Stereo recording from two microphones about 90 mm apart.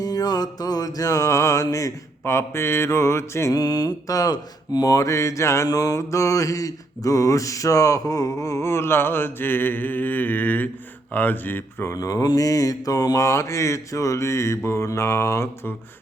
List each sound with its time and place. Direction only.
0.0 s mantra: 45° left (ahead or behind)
3.5 s mantra: 45° left (ahead or behind); by 11.9 s 20° left (ahead or behind)
11.9 s mantra: 40° left (ahead or behind)